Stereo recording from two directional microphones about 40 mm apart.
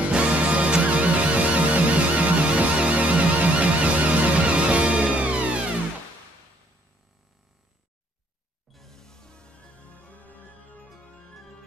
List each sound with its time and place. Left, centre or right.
0.1 s music: right
8.7 s music: centre; by 10.9 s left